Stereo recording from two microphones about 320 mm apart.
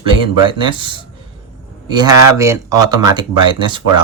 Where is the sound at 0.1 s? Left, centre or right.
Centre.